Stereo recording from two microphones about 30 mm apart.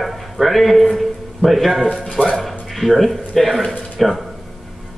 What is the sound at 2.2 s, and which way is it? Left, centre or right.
Speech, left.